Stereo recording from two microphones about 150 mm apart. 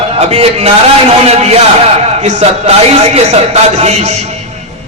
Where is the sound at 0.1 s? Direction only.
45° right (ahead or behind).